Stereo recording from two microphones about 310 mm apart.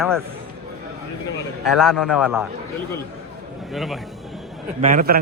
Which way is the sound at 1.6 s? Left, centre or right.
Centre.